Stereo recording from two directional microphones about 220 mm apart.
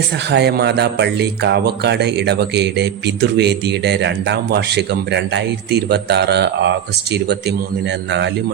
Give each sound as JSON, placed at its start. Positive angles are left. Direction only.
{"t": 0.3, "sound": "speech", "side_deg": -50}